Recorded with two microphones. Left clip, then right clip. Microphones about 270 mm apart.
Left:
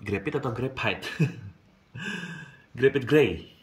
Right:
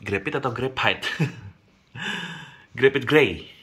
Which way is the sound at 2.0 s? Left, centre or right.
Centre.